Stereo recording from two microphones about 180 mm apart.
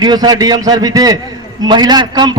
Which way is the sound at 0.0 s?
20° right (ahead or behind).